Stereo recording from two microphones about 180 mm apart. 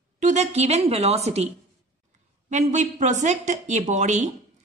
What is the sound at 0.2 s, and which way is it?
Speech, 40° right (ahead or behind).